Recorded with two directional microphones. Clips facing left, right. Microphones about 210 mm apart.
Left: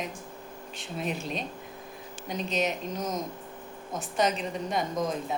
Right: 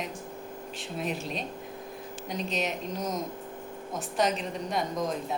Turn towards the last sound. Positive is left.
turn(degrees=0)  # may be behind; listen again after turning